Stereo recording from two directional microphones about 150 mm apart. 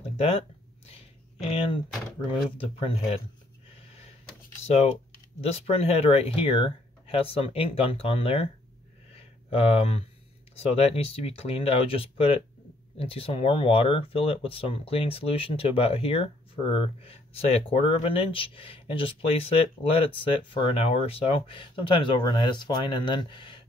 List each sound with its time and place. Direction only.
1.5 s speech: 35° left (ahead or behind)
5.4 s speech: 40° left (ahead or behind)
9.1 s a sound: 40° left (ahead or behind)
10.6 s speech: 40° left (ahead or behind)